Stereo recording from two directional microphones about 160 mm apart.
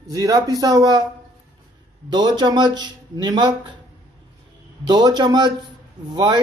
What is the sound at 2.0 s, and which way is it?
Speech, 25° right (ahead or behind).